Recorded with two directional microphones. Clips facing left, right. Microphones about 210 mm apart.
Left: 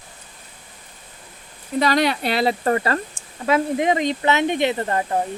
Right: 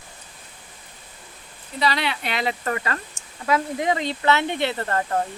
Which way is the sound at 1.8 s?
45° left (ahead or behind).